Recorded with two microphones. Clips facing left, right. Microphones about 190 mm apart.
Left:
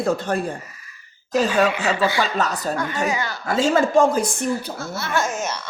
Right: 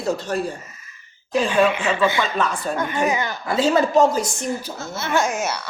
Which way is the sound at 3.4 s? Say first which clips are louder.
Even; 45° left (ahead or behind).